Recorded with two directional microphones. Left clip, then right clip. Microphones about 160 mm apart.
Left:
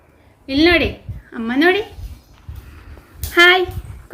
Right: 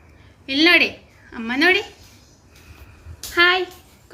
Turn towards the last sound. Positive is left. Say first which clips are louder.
# left 5 dB
turn(degrees=90)